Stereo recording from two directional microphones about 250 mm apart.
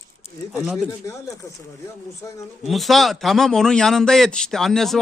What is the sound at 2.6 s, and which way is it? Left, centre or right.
A man's voice, centre.